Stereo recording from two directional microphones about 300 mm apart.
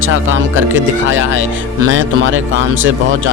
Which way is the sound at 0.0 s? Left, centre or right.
Right.